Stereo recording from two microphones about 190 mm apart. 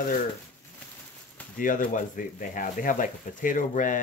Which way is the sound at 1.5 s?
45° left (ahead or behind).